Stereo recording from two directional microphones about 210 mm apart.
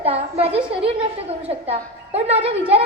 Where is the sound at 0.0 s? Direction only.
30° right (ahead or behind).